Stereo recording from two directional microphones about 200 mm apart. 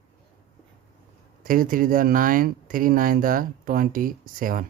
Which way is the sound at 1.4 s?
45° right (ahead or behind).